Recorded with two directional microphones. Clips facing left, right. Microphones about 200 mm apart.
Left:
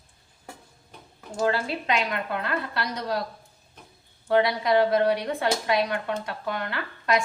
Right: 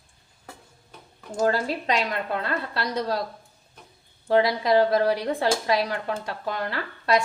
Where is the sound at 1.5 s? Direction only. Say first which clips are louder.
Right 1 dB; 40° right (ahead or behind).